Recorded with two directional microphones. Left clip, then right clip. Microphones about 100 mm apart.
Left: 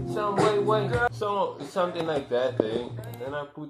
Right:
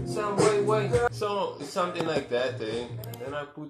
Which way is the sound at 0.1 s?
5° right (ahead or behind).